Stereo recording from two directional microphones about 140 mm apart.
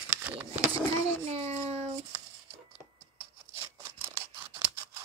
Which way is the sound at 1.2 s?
50° right (ahead or behind).